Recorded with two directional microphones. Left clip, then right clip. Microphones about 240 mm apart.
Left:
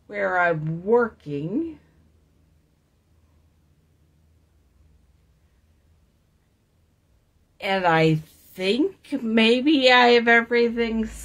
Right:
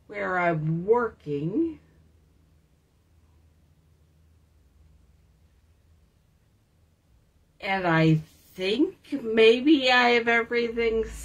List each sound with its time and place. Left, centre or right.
0.1 s a woman's voice: left
7.5 s a woman's voice: left